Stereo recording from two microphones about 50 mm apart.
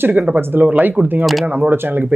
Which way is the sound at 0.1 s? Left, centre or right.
Right.